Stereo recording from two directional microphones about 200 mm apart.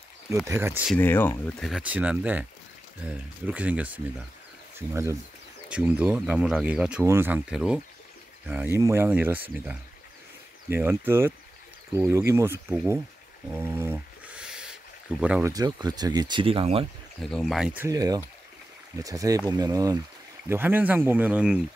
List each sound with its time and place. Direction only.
0.5 s speech: 10° right (ahead or behind)
0.9 s speech: 10° left (ahead or behind)
1.7 s speech: 5° right (ahead or behind)
13.5 s a sound: 10° right (ahead or behind)
15.5 s speech: 20° right (ahead or behind)
17.2 s speech: centre (ahead or behind)
17.8 s speech: 20° right (ahead or behind)